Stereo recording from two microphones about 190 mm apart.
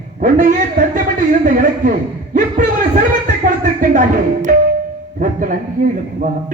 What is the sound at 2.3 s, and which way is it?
Speech, 45° right (ahead or behind).